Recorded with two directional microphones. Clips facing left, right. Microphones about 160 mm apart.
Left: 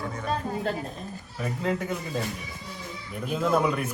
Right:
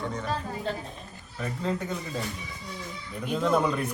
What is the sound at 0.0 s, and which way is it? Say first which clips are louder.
Speech: right 1 dB; 5° left (ahead or behind).